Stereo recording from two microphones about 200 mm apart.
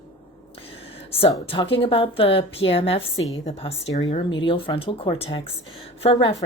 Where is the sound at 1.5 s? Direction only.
25° left (ahead or behind).